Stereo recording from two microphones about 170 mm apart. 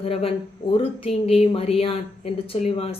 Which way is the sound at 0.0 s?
35° left (ahead or behind).